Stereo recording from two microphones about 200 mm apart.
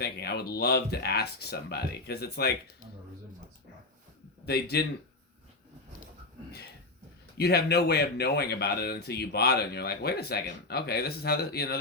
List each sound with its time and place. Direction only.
0.0 s speech: 55° left (ahead or behind)
4.4 s speech: 55° left (ahead or behind)
7.3 s speech: 55° left (ahead or behind)